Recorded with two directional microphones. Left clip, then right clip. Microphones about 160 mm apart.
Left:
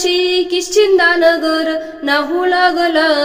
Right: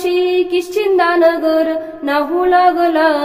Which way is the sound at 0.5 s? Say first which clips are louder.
Left 3 dB; 15° left (ahead or behind).